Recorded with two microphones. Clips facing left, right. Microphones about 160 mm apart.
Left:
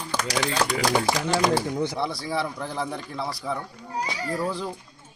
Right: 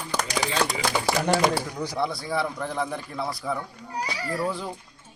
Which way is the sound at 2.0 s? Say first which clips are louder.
Right 1 dB; centre (ahead or behind).